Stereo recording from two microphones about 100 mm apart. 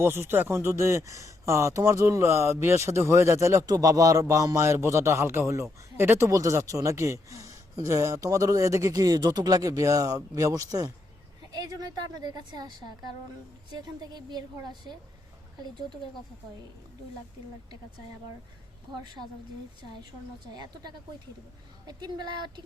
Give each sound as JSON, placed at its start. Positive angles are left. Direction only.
{"t": 0.0, "sound": "a woman's voice", "side_deg": -25}
{"t": 20.5, "sound": "a woman's voice", "side_deg": -45}